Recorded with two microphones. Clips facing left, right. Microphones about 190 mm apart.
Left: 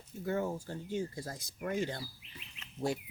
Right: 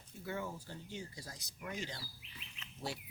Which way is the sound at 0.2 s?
45° left (ahead or behind).